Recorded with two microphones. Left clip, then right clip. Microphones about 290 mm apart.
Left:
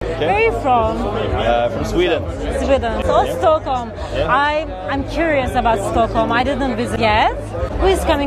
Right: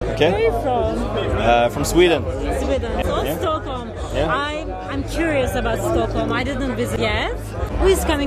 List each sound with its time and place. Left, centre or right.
0.3 s speech: centre
1.5 s a man's voice: right
2.7 s a man's voice: centre
5.1 s speech: centre
7.8 s speech: centre